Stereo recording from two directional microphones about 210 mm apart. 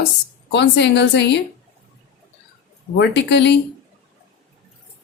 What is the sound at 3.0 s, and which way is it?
Speech, 55° left (ahead or behind).